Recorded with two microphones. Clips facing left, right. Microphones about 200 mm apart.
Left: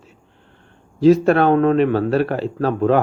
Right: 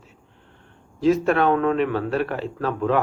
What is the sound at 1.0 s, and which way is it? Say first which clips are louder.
Speech: left 6 dB; 35° left (ahead or behind).